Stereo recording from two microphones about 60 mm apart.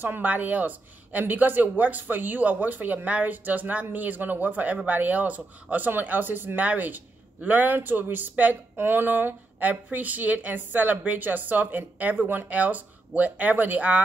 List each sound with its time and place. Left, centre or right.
0.0 s a woman's voice: right